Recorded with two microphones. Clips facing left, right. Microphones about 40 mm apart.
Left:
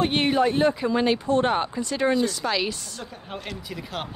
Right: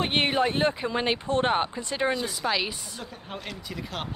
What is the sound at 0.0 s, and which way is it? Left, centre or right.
Speech, right.